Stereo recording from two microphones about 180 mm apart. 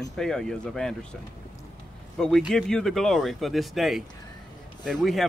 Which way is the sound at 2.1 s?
5° left (ahead or behind).